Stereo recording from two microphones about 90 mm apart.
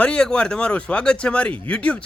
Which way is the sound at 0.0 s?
10° left (ahead or behind).